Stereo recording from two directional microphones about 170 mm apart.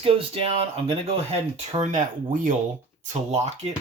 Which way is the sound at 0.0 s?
35° right (ahead or behind).